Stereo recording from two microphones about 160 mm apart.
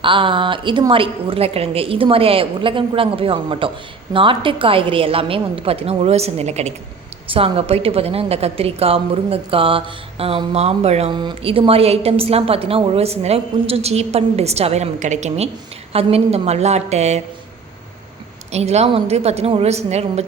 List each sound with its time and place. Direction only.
0.0 s a woman's voice: 30° right (ahead or behind)
11.1 s a woman's voice: 30° right (ahead or behind); by 17.2 s 45° right (ahead or behind)
18.5 s a woman's voice: 45° right (ahead or behind)